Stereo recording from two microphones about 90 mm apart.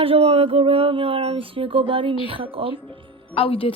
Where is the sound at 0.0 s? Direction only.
90° right.